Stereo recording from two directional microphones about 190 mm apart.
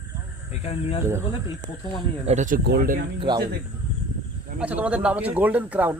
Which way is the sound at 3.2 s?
20° right (ahead or behind).